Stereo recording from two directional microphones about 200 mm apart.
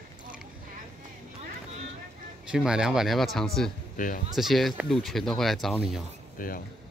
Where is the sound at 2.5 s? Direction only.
5° right (ahead or behind).